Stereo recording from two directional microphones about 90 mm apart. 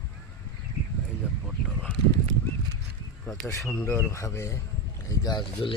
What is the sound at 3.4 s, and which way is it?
A man's voice, 30° left (ahead or behind).